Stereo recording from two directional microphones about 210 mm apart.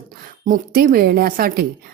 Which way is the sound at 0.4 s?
40° right (ahead or behind).